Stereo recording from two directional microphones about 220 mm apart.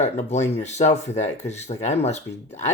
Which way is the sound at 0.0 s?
30° left (ahead or behind).